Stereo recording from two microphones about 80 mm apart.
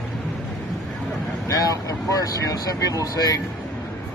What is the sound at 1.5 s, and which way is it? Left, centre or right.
Speech, left.